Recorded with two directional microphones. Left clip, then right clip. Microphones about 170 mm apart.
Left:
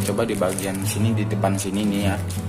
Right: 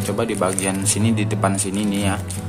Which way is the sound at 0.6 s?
25° right (ahead or behind).